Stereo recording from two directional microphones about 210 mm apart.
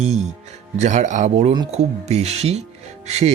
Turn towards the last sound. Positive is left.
turn(degrees=-30)  # may be behind; listen again after turning